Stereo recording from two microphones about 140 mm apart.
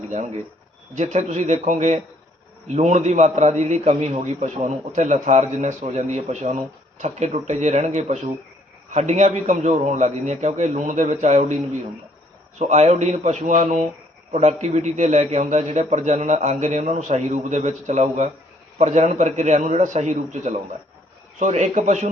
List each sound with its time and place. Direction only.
0.9 s a man's voice: 55° right (ahead or behind)
12.5 s a man's voice: 55° right (ahead or behind)